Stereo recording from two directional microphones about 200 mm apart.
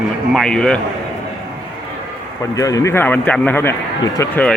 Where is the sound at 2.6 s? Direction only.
15° left (ahead or behind).